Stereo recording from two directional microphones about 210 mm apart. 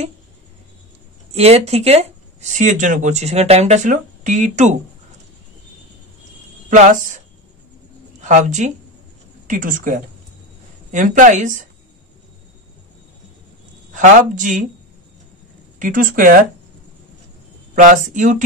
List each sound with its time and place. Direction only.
1.3 s speech: 30° right (ahead or behind)
6.7 s speech: 35° right (ahead or behind)
8.2 s speech: 35° right (ahead or behind)
13.9 s speech: 35° right (ahead or behind)
15.8 s speech: 40° right (ahead or behind)
17.7 s speech: 35° right (ahead or behind)